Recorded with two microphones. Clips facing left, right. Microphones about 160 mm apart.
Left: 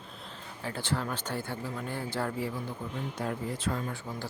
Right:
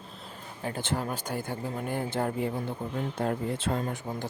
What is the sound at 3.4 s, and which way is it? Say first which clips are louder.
Speech: right 3 dB; 25° right (ahead or behind).